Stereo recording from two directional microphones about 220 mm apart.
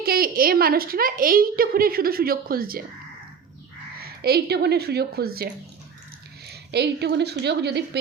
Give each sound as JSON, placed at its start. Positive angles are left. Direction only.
{"t": 0.0, "sound": "a woman's voice", "side_deg": -45}
{"t": 4.0, "sound": "a woman's voice", "side_deg": -45}
{"t": 6.5, "sound": "a woman's voice", "side_deg": -50}